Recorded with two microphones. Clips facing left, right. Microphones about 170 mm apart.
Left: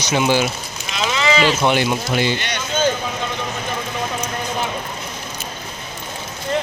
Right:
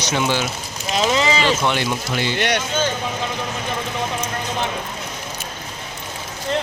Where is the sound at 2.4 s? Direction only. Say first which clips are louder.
Right 7 dB; 75° right (ahead or behind).